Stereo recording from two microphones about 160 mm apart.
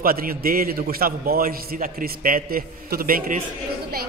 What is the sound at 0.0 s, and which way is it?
A man's voice, 65° right (ahead or behind).